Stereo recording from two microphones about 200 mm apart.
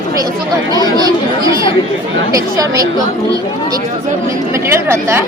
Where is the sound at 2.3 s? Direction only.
15° right (ahead or behind).